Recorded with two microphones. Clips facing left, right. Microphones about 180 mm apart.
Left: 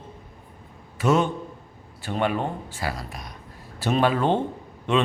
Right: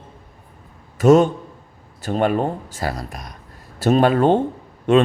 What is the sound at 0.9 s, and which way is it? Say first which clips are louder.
A man's voice: right 8 dB; 45° right (ahead or behind).